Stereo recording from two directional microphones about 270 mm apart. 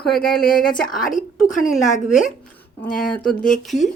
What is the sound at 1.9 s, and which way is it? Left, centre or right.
Speech, left.